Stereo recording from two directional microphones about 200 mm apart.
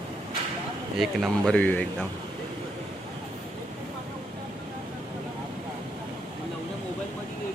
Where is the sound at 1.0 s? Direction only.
Centre (ahead or behind).